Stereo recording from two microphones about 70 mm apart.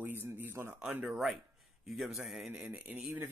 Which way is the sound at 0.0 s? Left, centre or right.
Right.